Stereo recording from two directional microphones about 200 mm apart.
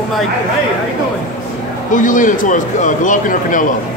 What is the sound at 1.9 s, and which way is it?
Speech, 40° left (ahead or behind).